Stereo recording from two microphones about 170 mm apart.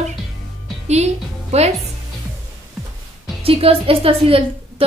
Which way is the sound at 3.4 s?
35° right (ahead or behind).